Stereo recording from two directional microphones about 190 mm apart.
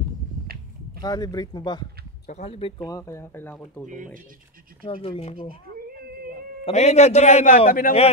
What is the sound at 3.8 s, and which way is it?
Speech, 45° right (ahead or behind).